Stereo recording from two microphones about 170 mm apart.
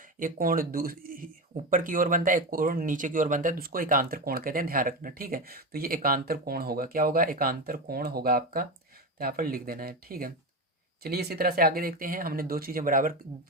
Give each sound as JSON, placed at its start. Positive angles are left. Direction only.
{"t": 0.2, "sound": "speech", "side_deg": -55}